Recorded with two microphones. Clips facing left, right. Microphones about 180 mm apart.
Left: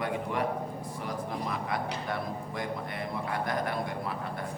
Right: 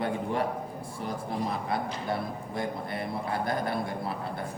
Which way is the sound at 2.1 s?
30° right (ahead or behind).